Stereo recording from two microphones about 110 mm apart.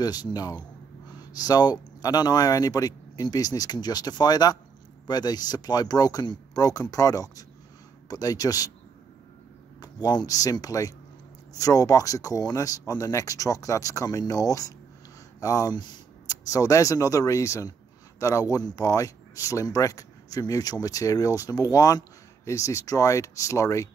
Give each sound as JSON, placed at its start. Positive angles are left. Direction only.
{"t": 0.0, "sound": "speech", "side_deg": 40}
{"t": 9.8, "sound": "speech", "side_deg": 40}